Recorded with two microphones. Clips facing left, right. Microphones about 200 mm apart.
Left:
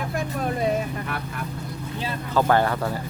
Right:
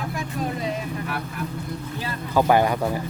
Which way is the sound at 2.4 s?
15° right (ahead or behind).